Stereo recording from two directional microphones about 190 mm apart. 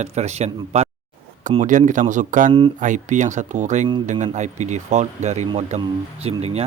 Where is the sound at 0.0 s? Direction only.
35° right (ahead or behind).